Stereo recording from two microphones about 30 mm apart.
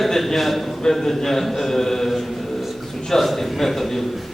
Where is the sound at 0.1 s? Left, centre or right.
Centre.